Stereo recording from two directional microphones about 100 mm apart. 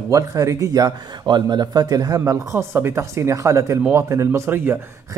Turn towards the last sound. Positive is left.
turn(degrees=-25)  # may be behind; listen again after turning